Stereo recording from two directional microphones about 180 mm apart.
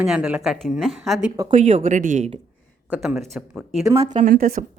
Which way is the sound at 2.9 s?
Centre (ahead or behind).